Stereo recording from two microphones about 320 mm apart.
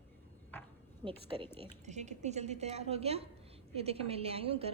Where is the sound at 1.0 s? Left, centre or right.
Centre.